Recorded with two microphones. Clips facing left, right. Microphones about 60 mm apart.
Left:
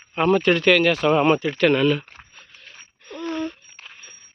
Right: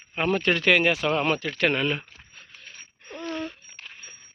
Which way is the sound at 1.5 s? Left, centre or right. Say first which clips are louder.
Left 6 dB; centre.